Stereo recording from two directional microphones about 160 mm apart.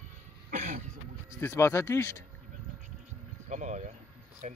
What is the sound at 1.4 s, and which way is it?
Speech, 15° left (ahead or behind).